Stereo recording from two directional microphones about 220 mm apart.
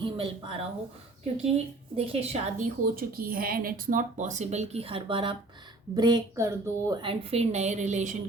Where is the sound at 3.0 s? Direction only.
40° right (ahead or behind).